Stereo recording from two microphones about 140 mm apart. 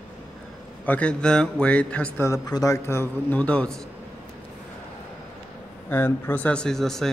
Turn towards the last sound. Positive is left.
turn(degrees=5)  # may be behind; listen again after turning